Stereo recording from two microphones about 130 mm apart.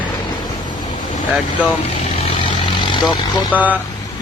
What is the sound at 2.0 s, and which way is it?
Vehicle, 55° left (ahead or behind).